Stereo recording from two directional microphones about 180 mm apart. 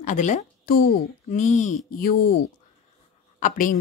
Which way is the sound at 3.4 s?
45° left (ahead or behind).